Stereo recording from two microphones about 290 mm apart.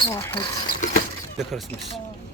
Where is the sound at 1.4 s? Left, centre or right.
Centre.